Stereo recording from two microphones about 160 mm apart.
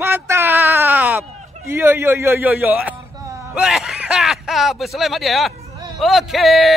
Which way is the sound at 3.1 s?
20° right (ahead or behind).